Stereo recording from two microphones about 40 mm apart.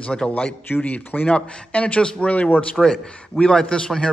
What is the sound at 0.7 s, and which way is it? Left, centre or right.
Speech, left.